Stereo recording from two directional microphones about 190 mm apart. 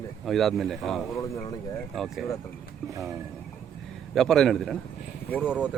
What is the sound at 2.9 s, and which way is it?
Speech, 15° right (ahead or behind).